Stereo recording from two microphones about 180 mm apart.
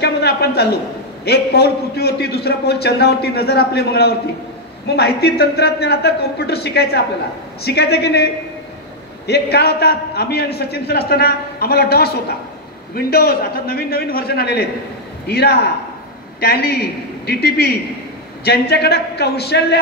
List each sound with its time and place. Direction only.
0.0 s a man's voice: 65° left (ahead or behind)
9.3 s a man's voice: 65° left (ahead or behind)